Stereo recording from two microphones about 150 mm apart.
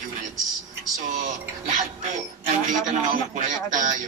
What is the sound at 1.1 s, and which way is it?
Speech, 55° right (ahead or behind).